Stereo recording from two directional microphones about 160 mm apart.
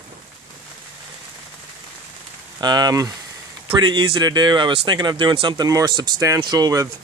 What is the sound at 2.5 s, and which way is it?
Speech, 25° right (ahead or behind).